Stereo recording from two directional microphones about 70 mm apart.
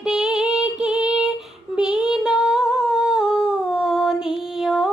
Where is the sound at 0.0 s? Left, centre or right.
Centre.